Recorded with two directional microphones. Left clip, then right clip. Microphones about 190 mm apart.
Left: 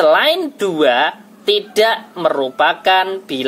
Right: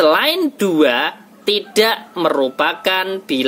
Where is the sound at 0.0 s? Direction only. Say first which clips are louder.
Left 2 dB; 35° right (ahead or behind).